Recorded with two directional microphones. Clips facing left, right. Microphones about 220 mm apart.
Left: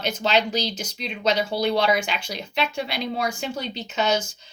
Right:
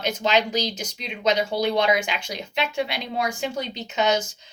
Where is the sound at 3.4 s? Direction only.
15° right (ahead or behind).